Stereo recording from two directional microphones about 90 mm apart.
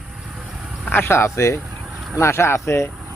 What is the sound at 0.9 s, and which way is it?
Speech, 25° left (ahead or behind).